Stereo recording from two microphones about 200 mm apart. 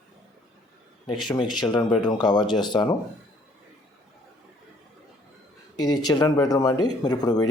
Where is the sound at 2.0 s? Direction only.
20° left (ahead or behind).